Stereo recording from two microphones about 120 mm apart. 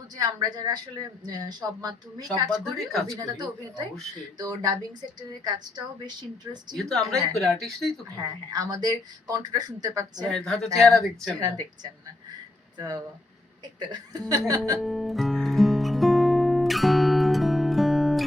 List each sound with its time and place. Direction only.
0.2 s speech: 35° right (ahead or behind)
2.5 s speech: centre (ahead or behind)
3.1 s speech: 35° right (ahead or behind)
6.7 s speech: 5° left (ahead or behind)
8.5 s speech: 30° right (ahead or behind)
10.2 s speech: 5° left (ahead or behind)
11.0 s speech: 30° right (ahead or behind)
13.7 s speech: 35° right (ahead or behind)
14.8 s music: centre (ahead or behind)